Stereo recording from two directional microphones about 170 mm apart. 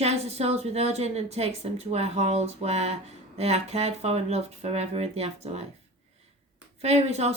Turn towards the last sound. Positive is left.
turn(degrees=-40)  # may be behind; listen again after turning